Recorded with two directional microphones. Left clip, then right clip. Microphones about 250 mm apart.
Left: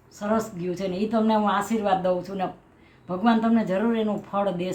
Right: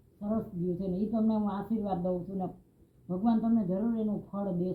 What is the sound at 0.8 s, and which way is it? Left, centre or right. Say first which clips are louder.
Speech: left 11 dB; left.